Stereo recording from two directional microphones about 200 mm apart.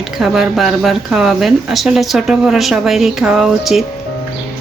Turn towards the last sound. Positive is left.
turn(degrees=0)  # may be behind; listen again after turning